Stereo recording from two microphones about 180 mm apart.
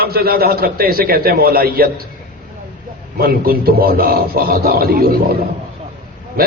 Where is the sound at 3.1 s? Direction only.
55° right (ahead or behind).